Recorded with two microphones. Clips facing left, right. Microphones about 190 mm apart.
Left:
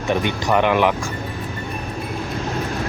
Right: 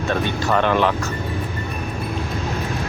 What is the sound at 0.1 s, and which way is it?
Speech, 15° left (ahead or behind).